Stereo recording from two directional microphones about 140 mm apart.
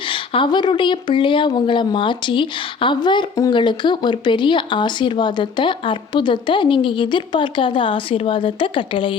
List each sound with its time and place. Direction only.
0.1 s speech: 35° left (ahead or behind)